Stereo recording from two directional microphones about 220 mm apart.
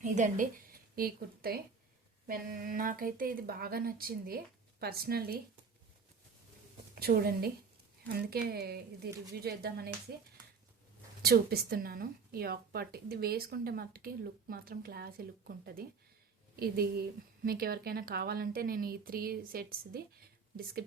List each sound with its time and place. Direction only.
0.0 s a woman's voice: 35° right (ahead or behind)
6.9 s a woman's voice: 45° right (ahead or behind)
11.2 s a woman's voice: 45° right (ahead or behind)